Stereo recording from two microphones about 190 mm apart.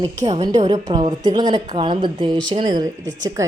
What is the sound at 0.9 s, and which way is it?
A woman's voice, 25° right (ahead or behind).